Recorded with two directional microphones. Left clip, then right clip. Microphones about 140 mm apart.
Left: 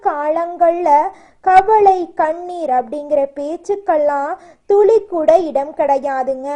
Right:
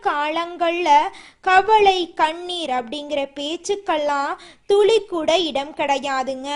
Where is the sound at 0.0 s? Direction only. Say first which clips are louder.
Left 4 dB; 30° right (ahead or behind).